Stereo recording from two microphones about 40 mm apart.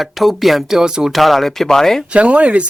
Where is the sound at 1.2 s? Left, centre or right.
Centre.